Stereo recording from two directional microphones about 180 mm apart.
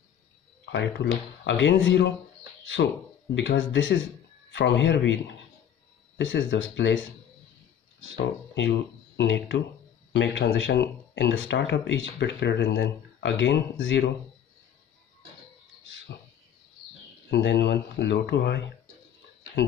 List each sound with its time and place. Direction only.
0.7 s speech: 80° left
3.3 s speech: 90° left
8.5 s speech: 70° left (ahead or behind)
17.3 s speech: 75° left (ahead or behind)